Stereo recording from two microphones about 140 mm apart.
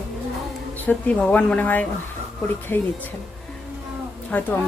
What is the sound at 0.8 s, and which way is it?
Speech, 10° left (ahead or behind).